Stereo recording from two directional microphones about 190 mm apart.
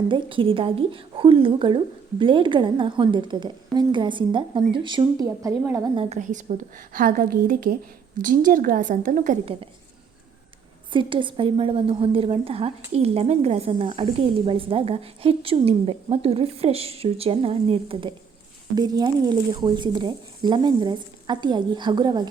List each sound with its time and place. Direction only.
0.1 s a woman's voice: 25° right (ahead or behind)
6.0 s a woman's voice: 40° right (ahead or behind)
10.9 s a woman's voice: 25° right (ahead or behind)